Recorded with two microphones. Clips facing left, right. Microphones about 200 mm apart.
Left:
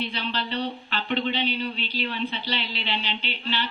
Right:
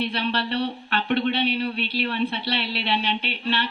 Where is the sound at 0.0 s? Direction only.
65° right (ahead or behind).